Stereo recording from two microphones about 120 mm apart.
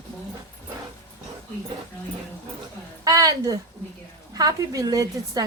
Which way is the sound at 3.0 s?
30° right (ahead or behind).